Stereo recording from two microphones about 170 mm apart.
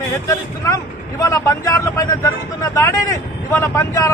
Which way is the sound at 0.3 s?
20° left (ahead or behind).